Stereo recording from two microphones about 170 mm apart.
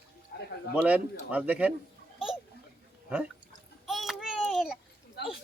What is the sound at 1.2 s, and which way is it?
Speech, 10° right (ahead or behind).